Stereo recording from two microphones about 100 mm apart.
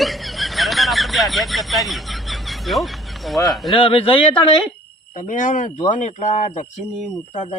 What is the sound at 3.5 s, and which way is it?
Speech, centre (ahead or behind).